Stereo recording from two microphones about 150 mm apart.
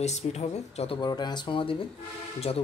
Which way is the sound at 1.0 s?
30° left (ahead or behind).